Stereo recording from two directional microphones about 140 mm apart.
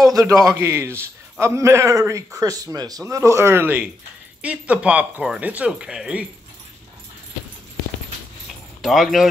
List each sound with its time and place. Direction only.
0.0 s a man's voice: 25° right (ahead or behind); by 6.2 s 5° right (ahead or behind)
8.8 s speech: centre (ahead or behind)